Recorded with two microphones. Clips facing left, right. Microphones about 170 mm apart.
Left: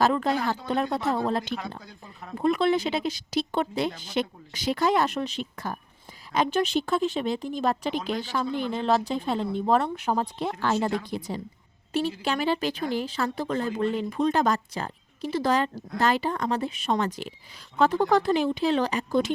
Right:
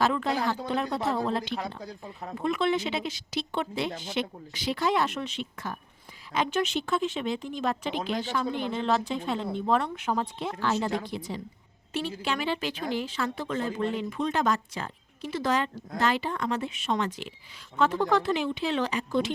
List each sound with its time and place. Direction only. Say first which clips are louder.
0.0 s a woman's voice: left 3 dB; 40° left (ahead or behind)
1.8 s speech: right 5 dB; 35° right (ahead or behind)
2.4 s a woman's voice: left 4 dB; 35° left (ahead or behind)